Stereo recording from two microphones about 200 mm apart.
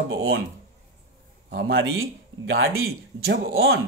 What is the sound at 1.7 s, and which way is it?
Speech, 80° right.